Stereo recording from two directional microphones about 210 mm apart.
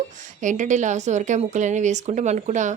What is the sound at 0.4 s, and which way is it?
A woman's voice, 35° right (ahead or behind).